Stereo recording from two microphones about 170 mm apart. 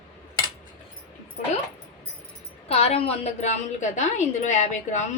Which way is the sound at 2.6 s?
35° left (ahead or behind).